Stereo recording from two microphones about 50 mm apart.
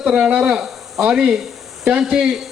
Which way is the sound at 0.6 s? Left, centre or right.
Centre.